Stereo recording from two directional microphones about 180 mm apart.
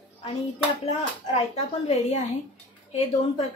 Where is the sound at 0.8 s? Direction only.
35° left (ahead or behind).